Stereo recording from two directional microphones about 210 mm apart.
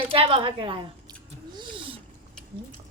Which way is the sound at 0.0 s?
25° right (ahead or behind).